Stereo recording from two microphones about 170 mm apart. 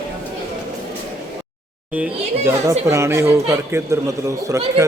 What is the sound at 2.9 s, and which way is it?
A man's voice, 15° right (ahead or behind).